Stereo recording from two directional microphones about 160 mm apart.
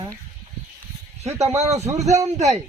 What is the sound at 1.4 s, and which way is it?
Speech, 40° right (ahead or behind).